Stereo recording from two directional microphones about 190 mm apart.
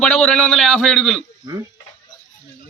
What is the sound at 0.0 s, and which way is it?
A man's voice, 5° left (ahead or behind).